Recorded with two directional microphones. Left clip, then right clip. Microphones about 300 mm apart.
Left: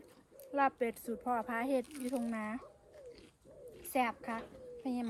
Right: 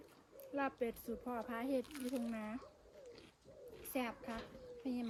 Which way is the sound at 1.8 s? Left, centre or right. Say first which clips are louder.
Left 4 dB; centre.